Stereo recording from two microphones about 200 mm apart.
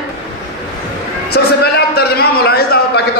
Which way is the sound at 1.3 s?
50° left (ahead or behind).